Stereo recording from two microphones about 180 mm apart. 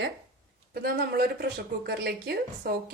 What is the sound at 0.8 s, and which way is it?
Speech, 60° right (ahead or behind).